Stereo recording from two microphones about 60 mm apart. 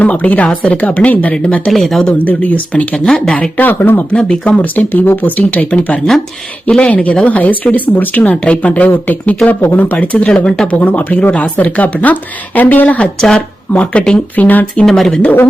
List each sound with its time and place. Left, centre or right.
0.0 s speech: left
1.7 s speech: centre
2.1 s speech: left
3.0 s speech: centre
3.6 s speech: left
4.1 s speech: centre
10.8 s speech: left
13.1 s speech: centre
14.3 s speech: left
14.8 s speech: centre